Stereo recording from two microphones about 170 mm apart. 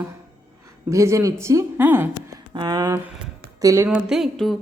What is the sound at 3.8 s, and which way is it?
Speech, 5° right (ahead or behind).